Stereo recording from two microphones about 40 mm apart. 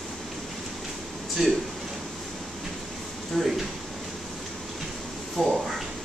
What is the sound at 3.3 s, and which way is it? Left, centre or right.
Speech, centre.